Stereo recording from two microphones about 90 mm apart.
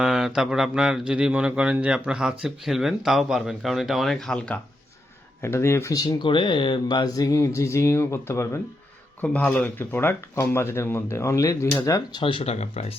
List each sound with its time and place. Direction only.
0.0 s speech: 5° right (ahead or behind); by 4.6 s 10° left (ahead or behind)
5.4 s speech: 30° left (ahead or behind); by 6.2 s 45° left (ahead or behind)
6.2 s speech: 65° left (ahead or behind); by 8.4 s 30° left (ahead or behind)
9.2 s speech: 15° left (ahead or behind); by 12.0 s 35° left (ahead or behind)
12.1 s speech: 75° left (ahead or behind)